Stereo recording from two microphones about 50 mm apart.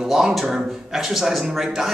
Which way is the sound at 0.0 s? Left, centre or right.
Centre.